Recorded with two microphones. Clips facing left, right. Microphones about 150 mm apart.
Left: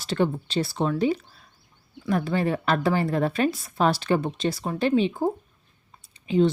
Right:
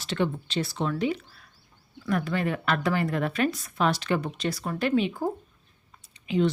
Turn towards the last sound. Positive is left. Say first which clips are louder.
# left 4 dB
turn(degrees=35)  # may be behind; listen again after turning